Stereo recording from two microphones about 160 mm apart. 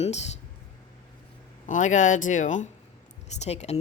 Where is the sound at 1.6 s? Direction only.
50° left (ahead or behind).